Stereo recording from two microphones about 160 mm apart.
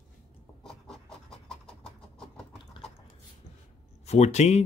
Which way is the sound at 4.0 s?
45° left (ahead or behind).